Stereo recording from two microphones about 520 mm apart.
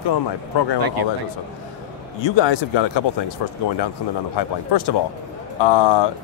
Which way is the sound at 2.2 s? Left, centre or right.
Left.